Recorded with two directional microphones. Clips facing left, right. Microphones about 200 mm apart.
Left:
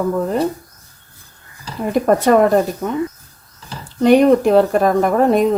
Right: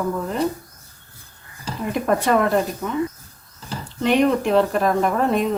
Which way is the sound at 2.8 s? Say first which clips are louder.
Left 5 dB; 55° left (ahead or behind).